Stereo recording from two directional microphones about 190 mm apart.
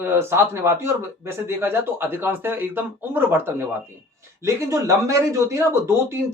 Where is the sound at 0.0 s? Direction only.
10° right (ahead or behind).